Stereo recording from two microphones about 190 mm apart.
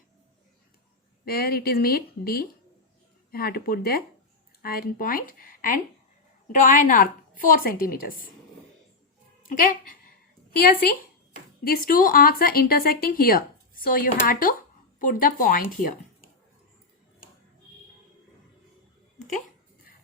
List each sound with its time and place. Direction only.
1.2 s speech: 55° left (ahead or behind)
9.5 s speech: 45° left (ahead or behind)